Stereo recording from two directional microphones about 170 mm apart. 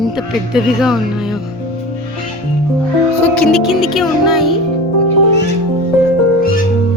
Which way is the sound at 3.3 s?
Centre (ahead or behind).